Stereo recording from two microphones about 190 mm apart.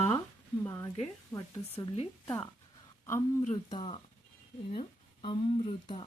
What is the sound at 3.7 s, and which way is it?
Speech, 25° left (ahead or behind).